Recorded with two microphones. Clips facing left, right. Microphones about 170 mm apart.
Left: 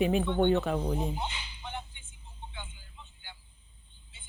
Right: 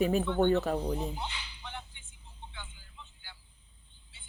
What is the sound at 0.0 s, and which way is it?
Speech, 40° right (ahead or behind).